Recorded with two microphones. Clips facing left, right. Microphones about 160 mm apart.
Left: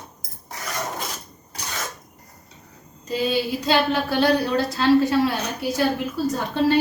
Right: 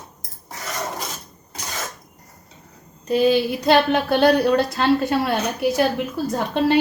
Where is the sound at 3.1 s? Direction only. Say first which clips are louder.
Right 6 dB; 60° right (ahead or behind).